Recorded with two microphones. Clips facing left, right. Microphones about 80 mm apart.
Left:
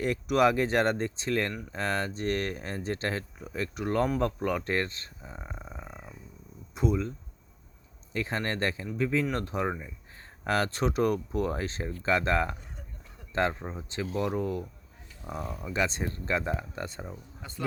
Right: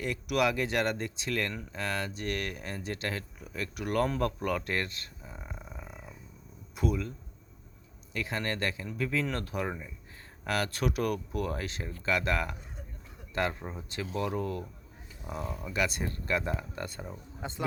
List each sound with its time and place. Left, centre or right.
0.0 s speech: left
5.3 s speech: centre
8.1 s speech: left
9.6 s speech: centre
10.4 s speech: left
13.6 s speech: centre
17.4 s a man's voice: right